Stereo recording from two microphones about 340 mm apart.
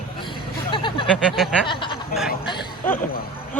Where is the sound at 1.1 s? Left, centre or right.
Centre.